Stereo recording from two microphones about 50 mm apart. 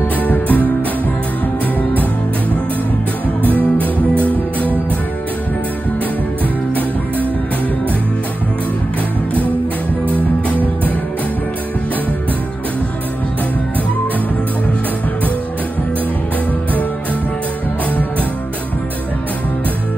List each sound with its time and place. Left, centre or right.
0.2 s music: left
4.2 s music: left